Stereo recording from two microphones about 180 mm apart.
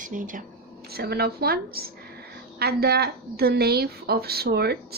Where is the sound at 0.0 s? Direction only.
45° right (ahead or behind).